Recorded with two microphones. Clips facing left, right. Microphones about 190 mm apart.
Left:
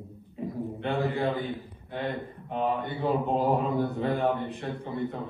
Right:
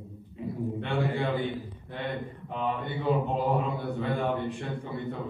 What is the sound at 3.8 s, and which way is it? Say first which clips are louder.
A man's voice: left 3 dB; 40° left (ahead or behind).